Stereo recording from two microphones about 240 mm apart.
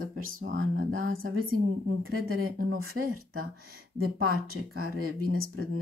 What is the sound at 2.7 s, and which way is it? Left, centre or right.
Speech, right.